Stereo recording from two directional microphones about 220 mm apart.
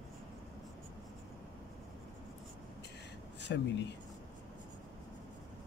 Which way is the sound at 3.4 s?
50° left (ahead or behind).